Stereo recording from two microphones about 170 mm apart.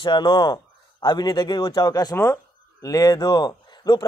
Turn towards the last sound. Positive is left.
turn(degrees=25)  # may be behind; listen again after turning